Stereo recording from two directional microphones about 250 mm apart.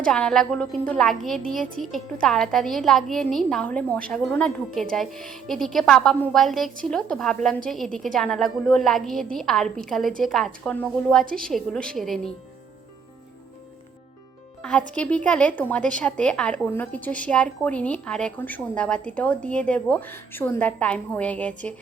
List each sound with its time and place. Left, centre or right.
0.0 s speech: centre
14.6 s speech: centre